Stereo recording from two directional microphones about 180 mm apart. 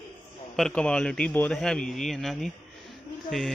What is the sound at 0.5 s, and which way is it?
A man's voice, 5° left (ahead or behind).